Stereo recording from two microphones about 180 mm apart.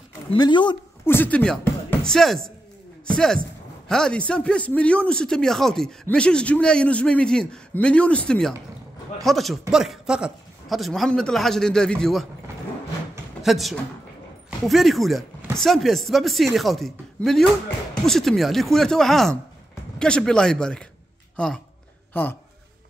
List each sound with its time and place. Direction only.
0.3 s speech: 25° left (ahead or behind)
1.0 s speech: 10° left (ahead or behind)
13.4 s speech: centre (ahead or behind)